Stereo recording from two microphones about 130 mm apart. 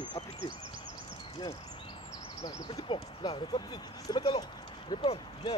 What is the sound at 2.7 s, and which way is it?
Speech, 40° left (ahead or behind).